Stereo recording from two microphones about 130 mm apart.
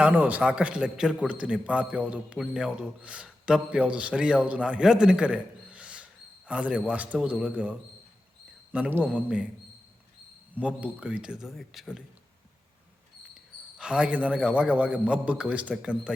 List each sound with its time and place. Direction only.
0.0 s a man's voice: 10° right (ahead or behind)
10.5 s a man's voice: 10° right (ahead or behind)
13.7 s a man's voice: 5° right (ahead or behind)